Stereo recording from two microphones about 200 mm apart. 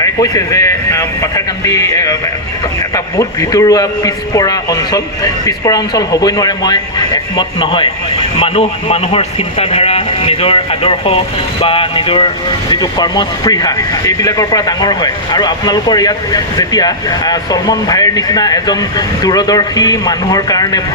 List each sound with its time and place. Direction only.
0.0 s speech: 15° left (ahead or behind)